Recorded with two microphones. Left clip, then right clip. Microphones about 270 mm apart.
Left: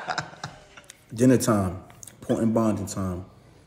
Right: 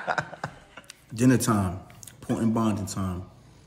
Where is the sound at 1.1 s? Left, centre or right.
Centre.